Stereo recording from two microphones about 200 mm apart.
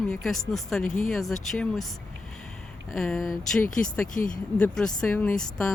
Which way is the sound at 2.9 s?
Centre (ahead or behind).